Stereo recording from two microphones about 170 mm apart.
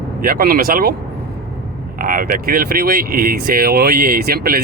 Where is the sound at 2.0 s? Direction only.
55° right (ahead or behind).